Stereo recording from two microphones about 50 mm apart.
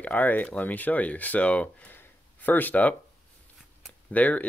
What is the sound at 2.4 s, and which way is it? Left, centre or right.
Speech, left.